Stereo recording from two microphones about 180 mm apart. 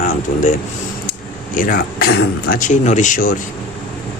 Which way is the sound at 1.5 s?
50° left (ahead or behind).